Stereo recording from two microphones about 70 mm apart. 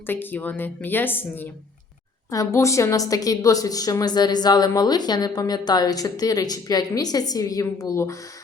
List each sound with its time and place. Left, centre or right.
0.1 s a woman's voice: left
2.3 s a woman's voice: left